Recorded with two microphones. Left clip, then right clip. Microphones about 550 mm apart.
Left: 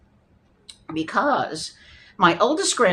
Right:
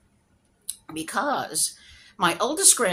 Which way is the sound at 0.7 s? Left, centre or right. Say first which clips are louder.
Left 5 dB; right.